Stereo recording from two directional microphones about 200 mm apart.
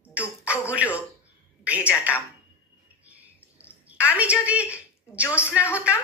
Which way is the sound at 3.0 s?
5° right (ahead or behind).